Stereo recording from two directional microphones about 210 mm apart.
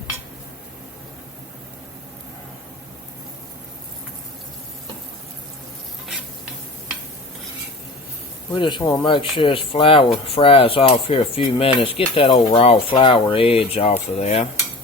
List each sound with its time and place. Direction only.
8.5 s speech: 20° left (ahead or behind)